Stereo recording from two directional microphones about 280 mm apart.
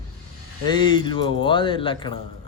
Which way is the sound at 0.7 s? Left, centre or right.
Centre.